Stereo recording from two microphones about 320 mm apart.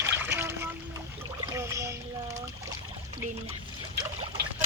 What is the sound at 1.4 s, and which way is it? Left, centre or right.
Music, centre.